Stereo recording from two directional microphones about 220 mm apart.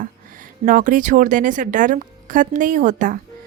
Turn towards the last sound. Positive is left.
turn(degrees=-35)  # may be behind; listen again after turning